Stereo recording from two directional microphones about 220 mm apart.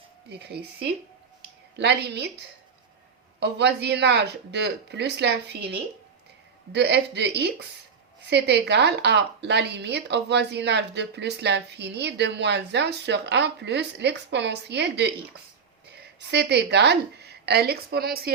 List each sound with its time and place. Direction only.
0.3 s a woman's voice: 50° right (ahead or behind)
3.4 s a woman's voice: 50° right (ahead or behind)
6.7 s a woman's voice: 50° right (ahead or behind)